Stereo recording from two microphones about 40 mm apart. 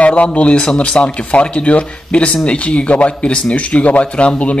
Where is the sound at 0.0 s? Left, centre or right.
Left.